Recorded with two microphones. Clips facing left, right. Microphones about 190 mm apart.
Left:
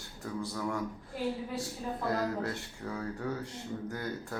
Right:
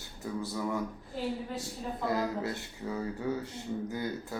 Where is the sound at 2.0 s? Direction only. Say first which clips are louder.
Right 1 dB; 5° right (ahead or behind).